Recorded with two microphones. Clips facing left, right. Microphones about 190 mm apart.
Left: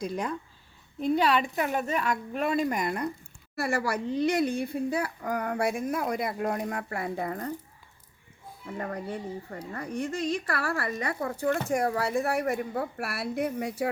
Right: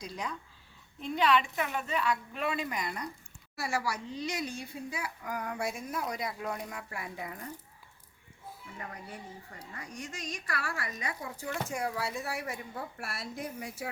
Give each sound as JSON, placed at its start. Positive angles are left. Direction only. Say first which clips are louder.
{"t": 0.0, "sound": "a woman's voice", "louder": "left 8 dB", "side_deg": 55}
{"t": 0.9, "sound": "a woman's voice", "louder": "left 4 dB", "side_deg": 40}
{"t": 8.6, "sound": "speech", "louder": "left 12 dB", "side_deg": 55}